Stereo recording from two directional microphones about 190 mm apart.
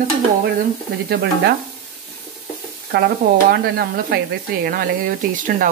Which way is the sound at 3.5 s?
55° right (ahead or behind).